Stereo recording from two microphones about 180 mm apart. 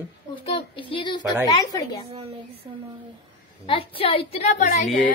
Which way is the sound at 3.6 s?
30° left (ahead or behind).